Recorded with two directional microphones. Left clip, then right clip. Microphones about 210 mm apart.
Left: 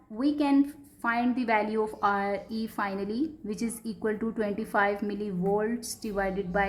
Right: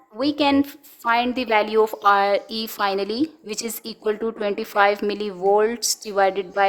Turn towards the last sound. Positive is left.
turn(degrees=-45)  # may be behind; listen again after turning